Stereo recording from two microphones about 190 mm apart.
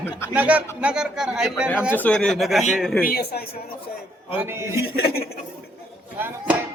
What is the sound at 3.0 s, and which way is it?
Speech, 55° left (ahead or behind).